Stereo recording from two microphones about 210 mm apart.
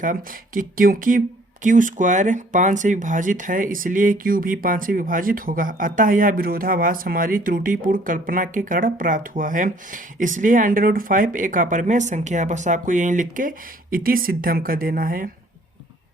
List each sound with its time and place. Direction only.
0.0 s speech: 40° right (ahead or behind)